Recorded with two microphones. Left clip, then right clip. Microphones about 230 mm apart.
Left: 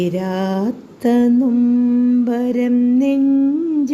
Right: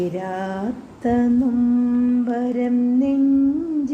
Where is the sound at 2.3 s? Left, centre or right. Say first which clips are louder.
Left 4 dB; left.